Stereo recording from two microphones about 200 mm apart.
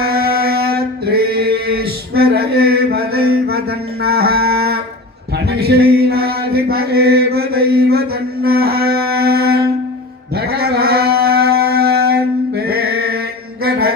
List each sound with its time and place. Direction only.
0.0 s mantra: 50° right (ahead or behind)
8.4 s a sound: 50° right (ahead or behind)
13.7 s music: 50° right (ahead or behind)